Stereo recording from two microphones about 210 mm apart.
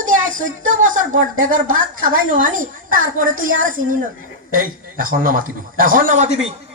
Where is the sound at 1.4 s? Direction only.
40° right (ahead or behind).